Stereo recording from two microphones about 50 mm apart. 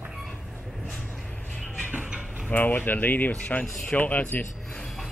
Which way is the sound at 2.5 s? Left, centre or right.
Left.